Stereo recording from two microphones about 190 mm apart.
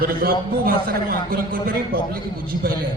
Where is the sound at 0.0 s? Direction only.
50° right (ahead or behind).